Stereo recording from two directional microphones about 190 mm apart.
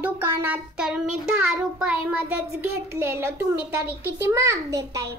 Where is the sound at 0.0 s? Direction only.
10° right (ahead or behind).